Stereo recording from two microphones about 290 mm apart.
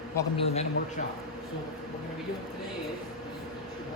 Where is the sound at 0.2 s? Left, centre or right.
Left.